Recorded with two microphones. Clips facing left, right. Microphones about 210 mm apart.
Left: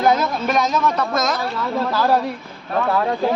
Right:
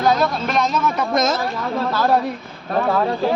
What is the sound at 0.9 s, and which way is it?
Speech, 20° right (ahead or behind).